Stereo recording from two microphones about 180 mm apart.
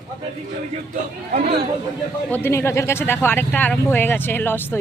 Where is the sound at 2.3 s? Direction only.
15° left (ahead or behind).